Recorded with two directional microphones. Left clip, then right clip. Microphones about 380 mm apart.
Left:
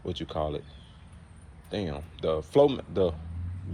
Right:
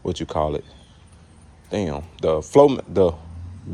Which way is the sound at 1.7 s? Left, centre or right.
Right.